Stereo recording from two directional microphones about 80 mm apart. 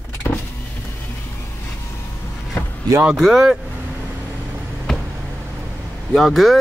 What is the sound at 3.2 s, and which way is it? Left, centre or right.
Speech, centre.